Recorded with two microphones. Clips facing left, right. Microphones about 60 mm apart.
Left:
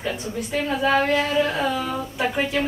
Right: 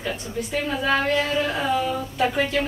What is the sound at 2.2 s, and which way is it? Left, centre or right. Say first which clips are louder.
Speech: right 1 dB; centre.